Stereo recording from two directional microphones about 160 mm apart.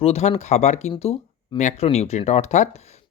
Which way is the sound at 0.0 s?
40° left (ahead or behind).